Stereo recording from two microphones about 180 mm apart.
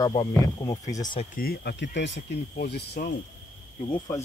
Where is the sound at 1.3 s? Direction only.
60° left (ahead or behind).